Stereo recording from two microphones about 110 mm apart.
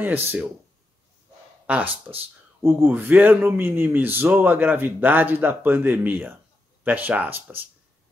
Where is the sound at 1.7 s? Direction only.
10° right (ahead or behind).